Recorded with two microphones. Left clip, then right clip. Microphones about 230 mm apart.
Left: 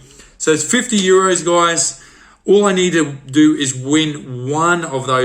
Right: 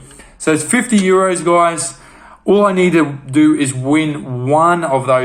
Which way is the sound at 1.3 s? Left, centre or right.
Right.